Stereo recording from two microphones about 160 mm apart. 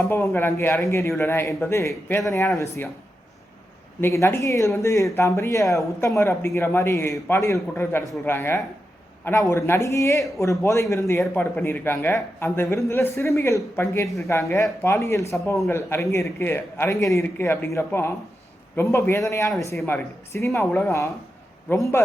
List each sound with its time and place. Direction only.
0.0 s a man's voice: 15° left (ahead or behind)
4.0 s a man's voice: 15° left (ahead or behind)